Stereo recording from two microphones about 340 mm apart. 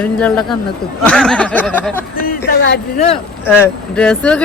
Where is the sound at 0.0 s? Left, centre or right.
Centre.